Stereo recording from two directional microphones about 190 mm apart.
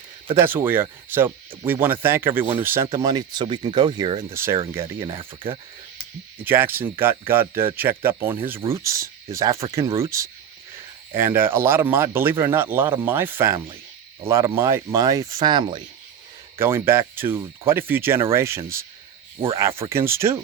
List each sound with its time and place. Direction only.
0.3 s speech: 10° right (ahead or behind)
6.4 s speech: 10° right (ahead or behind)
16.6 s speech: 10° right (ahead or behind)
19.4 s speech: 30° right (ahead or behind)
19.8 s speech: 15° right (ahead or behind)